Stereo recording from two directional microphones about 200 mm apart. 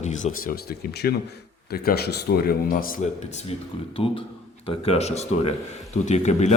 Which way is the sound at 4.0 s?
25° left (ahead or behind).